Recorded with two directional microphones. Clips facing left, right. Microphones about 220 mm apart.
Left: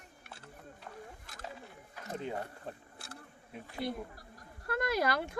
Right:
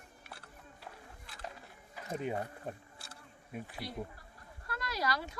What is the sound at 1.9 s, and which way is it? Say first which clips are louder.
Speech: right 2 dB; 10° right (ahead or behind).